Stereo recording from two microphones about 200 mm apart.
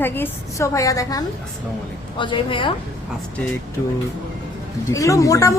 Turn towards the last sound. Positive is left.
turn(degrees=15)  # may be behind; listen again after turning